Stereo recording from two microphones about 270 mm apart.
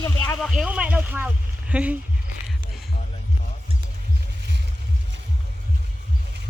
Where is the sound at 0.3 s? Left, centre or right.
Centre.